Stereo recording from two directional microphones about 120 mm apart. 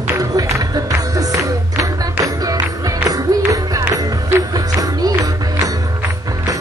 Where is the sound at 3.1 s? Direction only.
30° right (ahead or behind).